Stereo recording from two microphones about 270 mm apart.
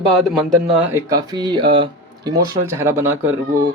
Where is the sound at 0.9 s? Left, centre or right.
Centre.